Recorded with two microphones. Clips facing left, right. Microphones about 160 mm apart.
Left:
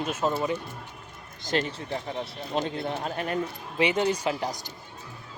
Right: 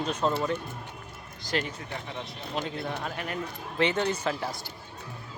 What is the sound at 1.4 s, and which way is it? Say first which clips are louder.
Speech: left 3 dB; 25° left (ahead or behind).